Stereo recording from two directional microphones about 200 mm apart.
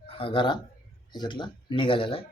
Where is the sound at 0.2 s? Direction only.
25° left (ahead or behind).